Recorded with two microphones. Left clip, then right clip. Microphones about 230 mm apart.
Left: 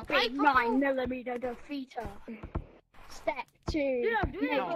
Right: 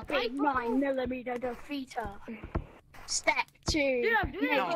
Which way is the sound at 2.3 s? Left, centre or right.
Centre.